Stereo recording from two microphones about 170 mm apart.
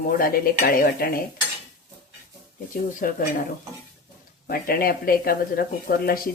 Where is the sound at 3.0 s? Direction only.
55° left (ahead or behind).